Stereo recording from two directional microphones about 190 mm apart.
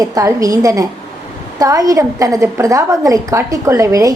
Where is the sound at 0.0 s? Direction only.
20° right (ahead or behind).